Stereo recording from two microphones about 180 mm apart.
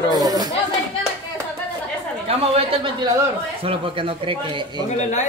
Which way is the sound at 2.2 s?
30° right (ahead or behind).